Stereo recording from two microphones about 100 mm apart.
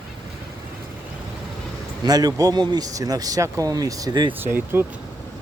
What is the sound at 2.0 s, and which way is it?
Speech, 40° right (ahead or behind).